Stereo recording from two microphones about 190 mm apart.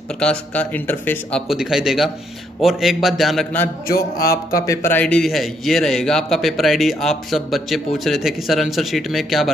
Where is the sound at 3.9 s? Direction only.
50° left (ahead or behind).